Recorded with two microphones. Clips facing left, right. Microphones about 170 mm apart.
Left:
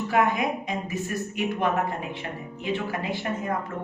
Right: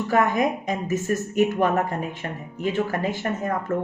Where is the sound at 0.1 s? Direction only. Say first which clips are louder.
Right 3 dB; 40° right (ahead or behind).